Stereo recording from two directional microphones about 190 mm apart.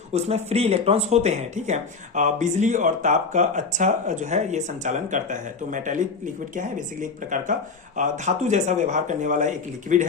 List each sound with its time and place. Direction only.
0.1 s speech: 35° right (ahead or behind)